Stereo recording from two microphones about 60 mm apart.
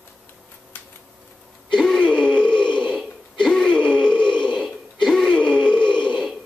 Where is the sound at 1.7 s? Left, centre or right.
Centre.